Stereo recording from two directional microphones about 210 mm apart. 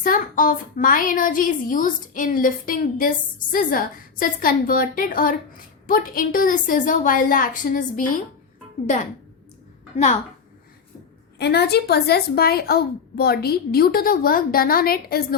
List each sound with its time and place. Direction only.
0.0 s a woman's voice: 40° left (ahead or behind)
11.3 s speech: 50° left (ahead or behind)